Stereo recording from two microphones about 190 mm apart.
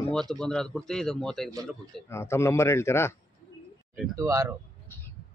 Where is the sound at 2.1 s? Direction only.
15° left (ahead or behind).